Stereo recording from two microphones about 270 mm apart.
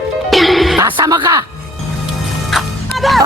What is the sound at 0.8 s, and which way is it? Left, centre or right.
Speech, centre.